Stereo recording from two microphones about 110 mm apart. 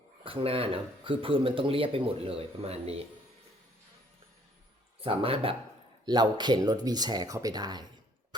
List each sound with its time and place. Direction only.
0.3 s speech: 55° right (ahead or behind)
4.9 s speech: 60° right (ahead or behind)
6.1 s speech: 40° right (ahead or behind)